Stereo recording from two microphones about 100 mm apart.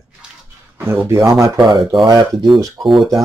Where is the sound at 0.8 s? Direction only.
25° right (ahead or behind).